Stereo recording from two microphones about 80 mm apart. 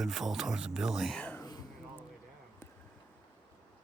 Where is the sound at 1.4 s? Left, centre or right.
Left.